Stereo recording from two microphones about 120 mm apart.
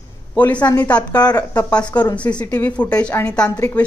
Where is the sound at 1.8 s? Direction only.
35° left (ahead or behind).